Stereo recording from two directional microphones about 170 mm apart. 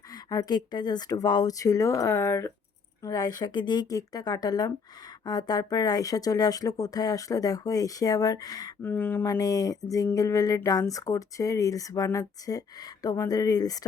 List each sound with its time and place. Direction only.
0.1 s speech: 20° left (ahead or behind)
8.9 s speech: 10° left (ahead or behind)